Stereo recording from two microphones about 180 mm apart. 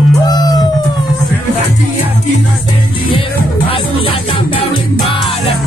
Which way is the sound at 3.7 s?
30° left (ahead or behind).